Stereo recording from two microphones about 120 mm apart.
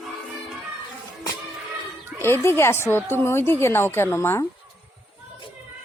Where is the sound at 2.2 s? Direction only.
20° left (ahead or behind).